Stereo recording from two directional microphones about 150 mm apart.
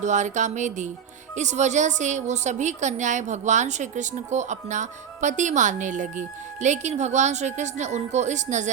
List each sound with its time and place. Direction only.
0.0 s a woman's voice: 55° right (ahead or behind)